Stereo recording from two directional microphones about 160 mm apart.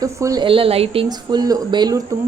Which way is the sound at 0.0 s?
20° right (ahead or behind).